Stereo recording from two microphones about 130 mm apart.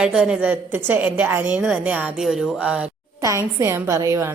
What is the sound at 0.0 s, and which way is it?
A woman's voice, 5° right (ahead or behind).